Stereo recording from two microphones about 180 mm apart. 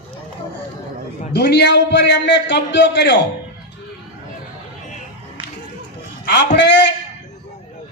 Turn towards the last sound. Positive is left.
turn(degrees=75)  # may be behind; listen again after turning